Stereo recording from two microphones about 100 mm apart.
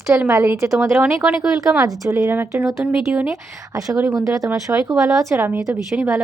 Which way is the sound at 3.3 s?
35° right (ahead or behind).